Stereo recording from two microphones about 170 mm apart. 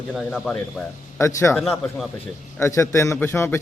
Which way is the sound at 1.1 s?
15° left (ahead or behind).